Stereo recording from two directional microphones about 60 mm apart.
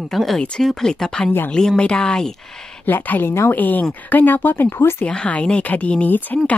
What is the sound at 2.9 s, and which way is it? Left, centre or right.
Speech, left.